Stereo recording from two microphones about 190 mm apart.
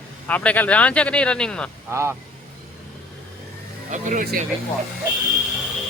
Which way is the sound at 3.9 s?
40° right (ahead or behind).